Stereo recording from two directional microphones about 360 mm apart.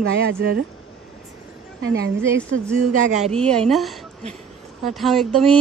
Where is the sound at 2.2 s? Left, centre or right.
Centre.